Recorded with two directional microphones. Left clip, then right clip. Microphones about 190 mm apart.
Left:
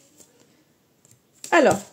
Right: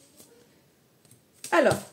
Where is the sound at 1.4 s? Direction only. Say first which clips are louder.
Left 5 dB; 40° left (ahead or behind).